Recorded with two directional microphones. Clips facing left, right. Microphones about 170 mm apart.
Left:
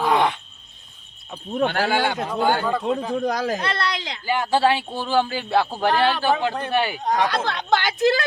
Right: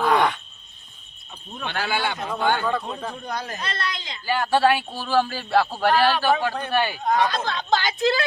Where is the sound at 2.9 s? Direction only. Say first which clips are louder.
Left 9 dB; 90° left.